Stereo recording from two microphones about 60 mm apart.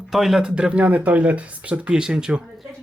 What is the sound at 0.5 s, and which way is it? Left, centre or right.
Speech, centre.